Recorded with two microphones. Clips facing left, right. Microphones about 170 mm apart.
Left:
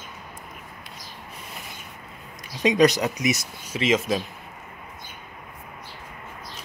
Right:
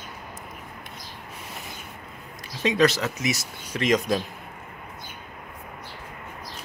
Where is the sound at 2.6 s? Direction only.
15° left (ahead or behind).